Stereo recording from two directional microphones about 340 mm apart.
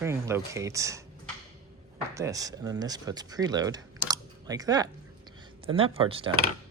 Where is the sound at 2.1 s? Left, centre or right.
Centre.